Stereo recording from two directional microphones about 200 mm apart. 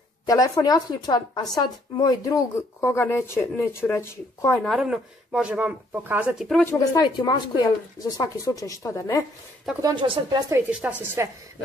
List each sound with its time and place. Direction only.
0.3 s a woman's voice: 20° left (ahead or behind)
4.6 s speech: centre (ahead or behind)
6.6 s a woman's voice: 15° left (ahead or behind)
9.8 s speech: 20° right (ahead or behind)
10.5 s speech: 5° right (ahead or behind)